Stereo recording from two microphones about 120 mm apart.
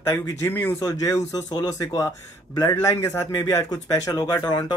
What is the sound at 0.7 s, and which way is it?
Speech, 30° left (ahead or behind).